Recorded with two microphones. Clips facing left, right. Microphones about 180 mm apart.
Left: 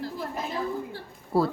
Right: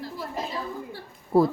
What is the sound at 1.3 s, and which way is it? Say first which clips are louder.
Speech: right 4 dB; 20° right (ahead or behind).